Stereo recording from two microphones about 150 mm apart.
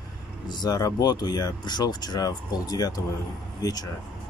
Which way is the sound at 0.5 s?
30° left (ahead or behind).